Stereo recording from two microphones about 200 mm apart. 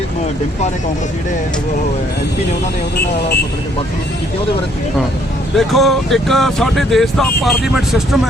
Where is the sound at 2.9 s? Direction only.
50° left (ahead or behind).